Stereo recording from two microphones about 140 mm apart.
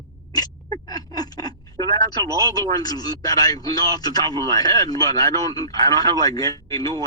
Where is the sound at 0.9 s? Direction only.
25° left (ahead or behind).